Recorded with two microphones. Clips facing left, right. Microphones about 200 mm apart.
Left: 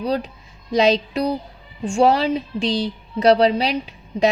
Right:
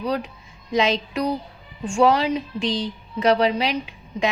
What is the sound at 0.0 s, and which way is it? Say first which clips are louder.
A woman's voice: left 3 dB; 35° left (ahead or behind).